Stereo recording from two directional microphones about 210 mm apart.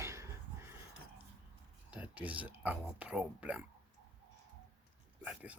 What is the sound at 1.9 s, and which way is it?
Speech, 5° right (ahead or behind).